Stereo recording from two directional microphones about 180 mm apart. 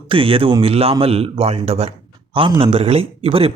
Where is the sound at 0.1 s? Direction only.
30° right (ahead or behind).